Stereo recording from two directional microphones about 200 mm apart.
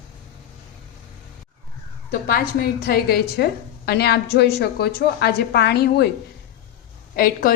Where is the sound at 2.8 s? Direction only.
50° left (ahead or behind).